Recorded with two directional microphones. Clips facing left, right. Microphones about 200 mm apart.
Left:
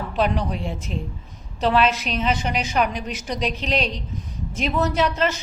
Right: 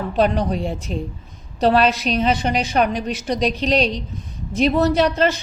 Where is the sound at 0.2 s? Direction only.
35° right (ahead or behind).